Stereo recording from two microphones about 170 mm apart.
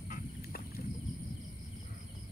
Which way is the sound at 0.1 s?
60° left (ahead or behind).